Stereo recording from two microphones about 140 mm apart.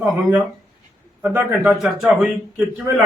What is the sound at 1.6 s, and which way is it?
Speech, 5° right (ahead or behind).